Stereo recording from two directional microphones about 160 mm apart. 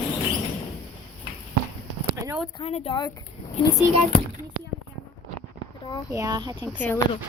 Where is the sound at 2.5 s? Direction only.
35° left (ahead or behind).